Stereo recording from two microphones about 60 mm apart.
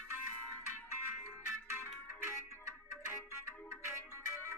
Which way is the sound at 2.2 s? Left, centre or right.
Right.